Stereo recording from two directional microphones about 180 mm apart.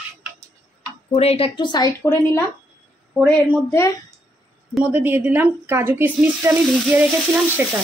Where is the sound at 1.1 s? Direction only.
35° left (ahead or behind).